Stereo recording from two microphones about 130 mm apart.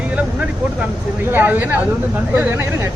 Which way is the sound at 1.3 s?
15° right (ahead or behind).